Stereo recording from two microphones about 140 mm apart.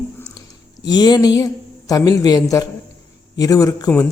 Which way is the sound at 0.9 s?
30° left (ahead or behind).